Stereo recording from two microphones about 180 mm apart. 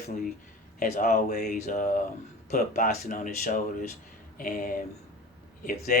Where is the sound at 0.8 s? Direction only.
50° left (ahead or behind).